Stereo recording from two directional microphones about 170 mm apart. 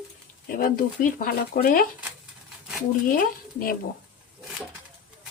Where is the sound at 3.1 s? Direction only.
55° left (ahead or behind).